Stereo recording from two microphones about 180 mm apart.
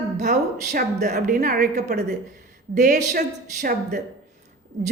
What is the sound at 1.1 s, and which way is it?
A woman's voice, 55° right (ahead or behind).